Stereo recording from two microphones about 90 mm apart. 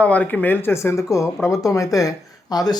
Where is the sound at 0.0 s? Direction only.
15° left (ahead or behind).